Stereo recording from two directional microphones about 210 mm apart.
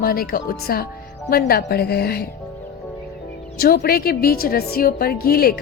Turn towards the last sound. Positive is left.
turn(degrees=45)  # may be behind; listen again after turning